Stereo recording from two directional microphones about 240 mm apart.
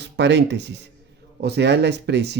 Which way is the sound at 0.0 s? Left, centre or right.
Right.